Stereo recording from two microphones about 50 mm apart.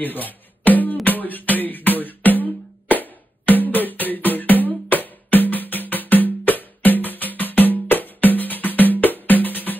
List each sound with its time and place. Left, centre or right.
0.0 s music: left